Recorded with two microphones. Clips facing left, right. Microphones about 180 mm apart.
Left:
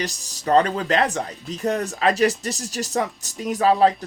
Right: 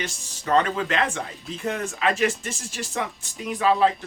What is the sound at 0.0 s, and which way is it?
Speech, 40° left (ahead or behind).